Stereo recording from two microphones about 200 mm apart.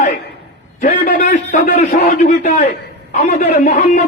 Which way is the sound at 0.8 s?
45° left (ahead or behind).